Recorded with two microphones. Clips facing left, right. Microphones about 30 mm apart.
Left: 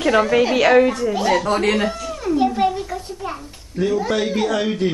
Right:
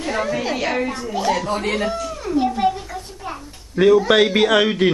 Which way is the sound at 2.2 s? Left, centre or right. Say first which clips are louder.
Left 1 dB; centre.